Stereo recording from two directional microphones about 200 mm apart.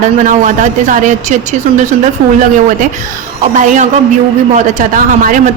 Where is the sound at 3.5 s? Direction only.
40° right (ahead or behind).